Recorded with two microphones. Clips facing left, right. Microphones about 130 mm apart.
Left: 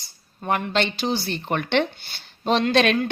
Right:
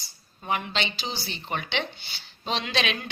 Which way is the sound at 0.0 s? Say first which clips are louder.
Left 8 dB; 50° left (ahead or behind).